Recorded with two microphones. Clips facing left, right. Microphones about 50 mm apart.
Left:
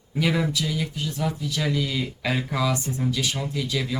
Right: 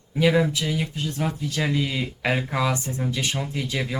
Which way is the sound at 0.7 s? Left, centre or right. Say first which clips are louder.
Right 1 dB; right.